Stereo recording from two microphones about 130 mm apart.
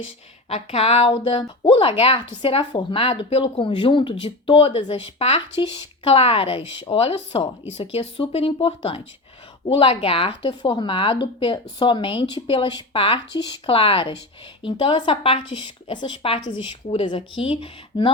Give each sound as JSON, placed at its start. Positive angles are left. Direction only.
{"t": 0.4, "sound": "a woman's voice", "side_deg": 50}